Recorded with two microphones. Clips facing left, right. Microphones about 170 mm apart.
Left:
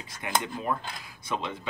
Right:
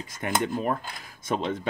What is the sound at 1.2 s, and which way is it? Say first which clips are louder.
Speech: right 5 dB; 45° right (ahead or behind).